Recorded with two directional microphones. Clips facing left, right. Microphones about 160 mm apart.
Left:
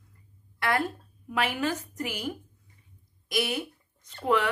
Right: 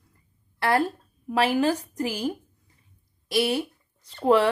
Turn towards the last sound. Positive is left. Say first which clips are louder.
# right 6 dB
turn(degrees=-35)  # may be behind; listen again after turning